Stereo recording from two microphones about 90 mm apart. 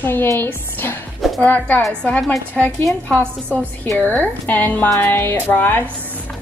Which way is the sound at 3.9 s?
20° left (ahead or behind).